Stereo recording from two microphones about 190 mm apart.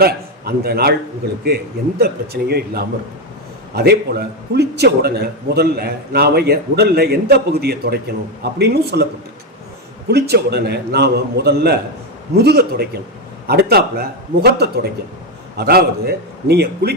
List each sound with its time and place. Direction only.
0.0 s a man's voice: 55° right (ahead or behind)
2.0 s a man's voice: 55° right (ahead or behind)
10.1 s a man's voice: 60° right (ahead or behind)